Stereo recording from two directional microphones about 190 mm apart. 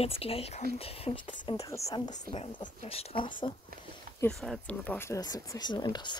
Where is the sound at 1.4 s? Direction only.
20° left (ahead or behind).